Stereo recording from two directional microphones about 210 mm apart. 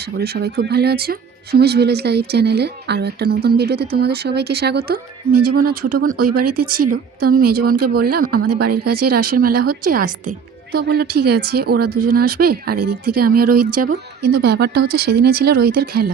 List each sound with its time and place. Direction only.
0.2 s speech: 50° right (ahead or behind)